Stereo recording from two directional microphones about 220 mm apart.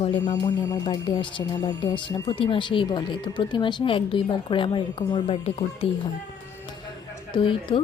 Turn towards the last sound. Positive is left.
turn(degrees=25)  # may be behind; listen again after turning